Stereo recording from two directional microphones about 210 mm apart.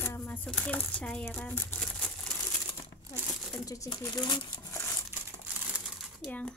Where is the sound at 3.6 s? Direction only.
15° left (ahead or behind).